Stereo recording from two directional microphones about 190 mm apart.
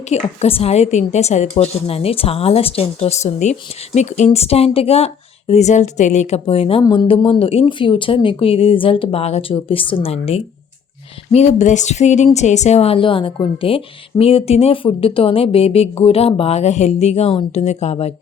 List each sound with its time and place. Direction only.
0.1 s a woman's voice: 35° left (ahead or behind)